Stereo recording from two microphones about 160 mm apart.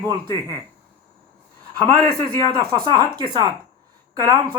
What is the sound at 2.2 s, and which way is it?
Speech, 30° right (ahead or behind).